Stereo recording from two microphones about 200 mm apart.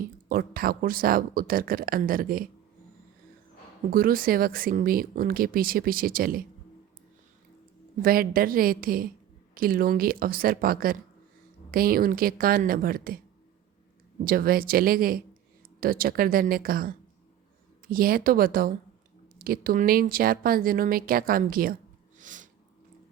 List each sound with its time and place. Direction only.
0.0 s speech: 45° right (ahead or behind)
3.9 s speech: 45° right (ahead or behind)
8.0 s speech: 45° right (ahead or behind)
14.3 s speech: 50° right (ahead or behind)
22.2 s a sound: 40° right (ahead or behind)